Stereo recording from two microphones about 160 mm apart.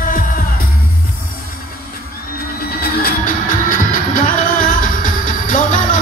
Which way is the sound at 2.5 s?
70° left (ahead or behind).